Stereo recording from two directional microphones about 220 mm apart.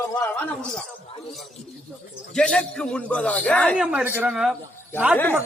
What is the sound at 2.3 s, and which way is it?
Speech, 5° left (ahead or behind).